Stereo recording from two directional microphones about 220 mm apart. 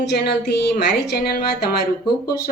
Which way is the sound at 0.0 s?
50° left (ahead or behind).